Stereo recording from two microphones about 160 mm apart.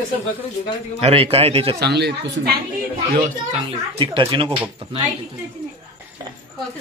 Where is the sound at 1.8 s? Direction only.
90° right.